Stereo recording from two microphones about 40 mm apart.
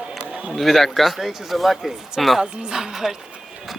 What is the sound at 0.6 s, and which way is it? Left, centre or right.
Speech, centre.